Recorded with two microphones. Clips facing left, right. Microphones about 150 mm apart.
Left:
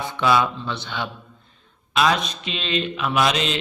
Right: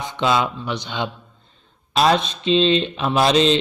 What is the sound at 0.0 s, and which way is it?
Speech, 20° right (ahead or behind).